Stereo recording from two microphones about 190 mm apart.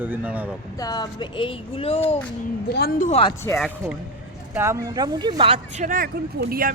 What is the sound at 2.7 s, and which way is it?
Speech, 55° left (ahead or behind).